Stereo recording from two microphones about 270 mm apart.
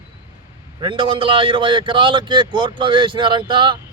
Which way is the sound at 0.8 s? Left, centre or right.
Centre.